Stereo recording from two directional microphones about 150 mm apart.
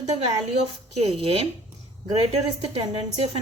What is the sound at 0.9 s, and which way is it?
Speech, 45° right (ahead or behind).